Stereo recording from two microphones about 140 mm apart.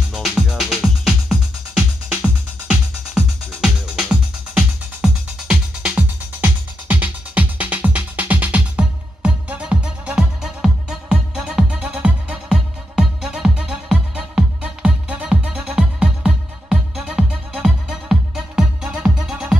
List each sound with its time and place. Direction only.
0.1 s music: 5° right (ahead or behind)